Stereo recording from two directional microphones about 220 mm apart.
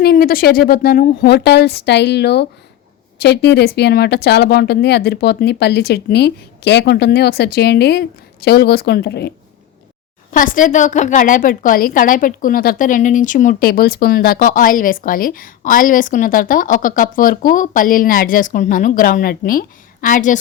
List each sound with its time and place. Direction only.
0.0 s speech: 45° left (ahead or behind)
10.3 s a woman's voice: 40° left (ahead or behind)